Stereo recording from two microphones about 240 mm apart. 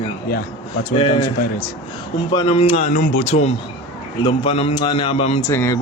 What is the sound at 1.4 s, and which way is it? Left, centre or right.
Speech, left.